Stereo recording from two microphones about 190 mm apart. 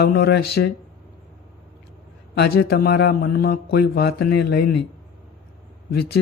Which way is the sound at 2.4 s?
55° left (ahead or behind).